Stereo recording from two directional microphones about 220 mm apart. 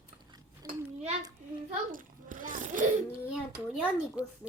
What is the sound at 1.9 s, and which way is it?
Babbling, 35° right (ahead or behind).